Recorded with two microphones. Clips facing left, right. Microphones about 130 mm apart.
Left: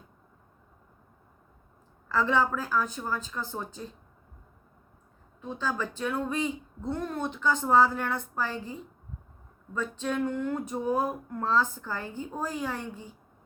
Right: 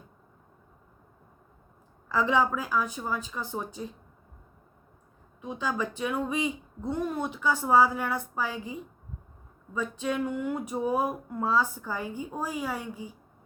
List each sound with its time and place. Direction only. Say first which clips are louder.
2.0 s speech: right 1 dB; 15° right (ahead or behind)
5.4 s speech: right 1 dB; 15° right (ahead or behind)